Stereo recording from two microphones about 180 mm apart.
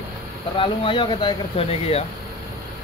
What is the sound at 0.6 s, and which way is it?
Speech, 30° left (ahead or behind).